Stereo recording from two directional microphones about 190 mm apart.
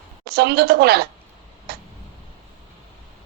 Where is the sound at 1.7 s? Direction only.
55° right (ahead or behind).